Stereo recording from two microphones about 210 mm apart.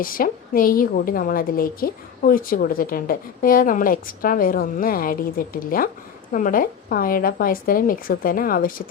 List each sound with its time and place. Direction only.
0.0 s a woman's voice: 40° left (ahead or behind)